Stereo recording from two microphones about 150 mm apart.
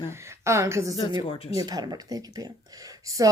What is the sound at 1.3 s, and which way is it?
Speech, 40° left (ahead or behind).